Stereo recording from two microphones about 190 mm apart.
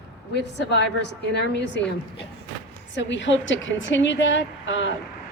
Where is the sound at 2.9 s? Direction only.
70° left (ahead or behind).